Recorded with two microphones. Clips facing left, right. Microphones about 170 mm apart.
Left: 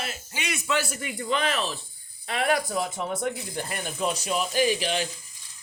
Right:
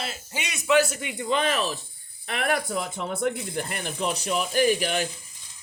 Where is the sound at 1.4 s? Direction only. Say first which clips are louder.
Right 3 dB; 40° right (ahead or behind).